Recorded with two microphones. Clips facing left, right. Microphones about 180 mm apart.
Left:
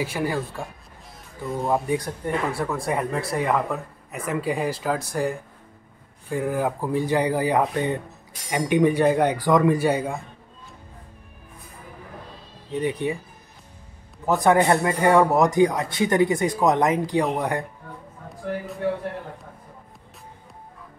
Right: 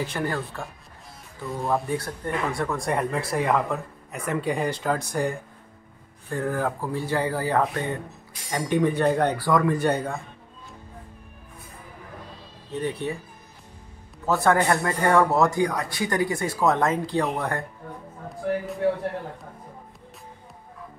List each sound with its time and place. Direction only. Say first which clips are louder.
0.0 s a man's voice: left 2 dB; 10° left (ahead or behind)
6.3 s a man's voice: left 2 dB; 15° left (ahead or behind)
9.8 s a man's voice: left 2 dB; 10° left (ahead or behind)
12.7 s a man's voice: left 3 dB; 15° left (ahead or behind)
14.2 s a man's voice: left 3 dB; 15° left (ahead or behind)